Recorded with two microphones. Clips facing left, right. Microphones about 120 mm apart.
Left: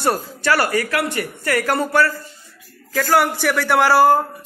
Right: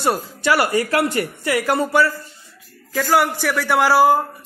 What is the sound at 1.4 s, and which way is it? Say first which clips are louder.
A man's voice: left 1 dB; 10° right (ahead or behind).